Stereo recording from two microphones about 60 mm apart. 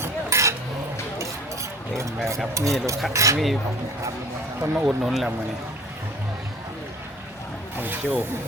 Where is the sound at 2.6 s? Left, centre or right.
Right.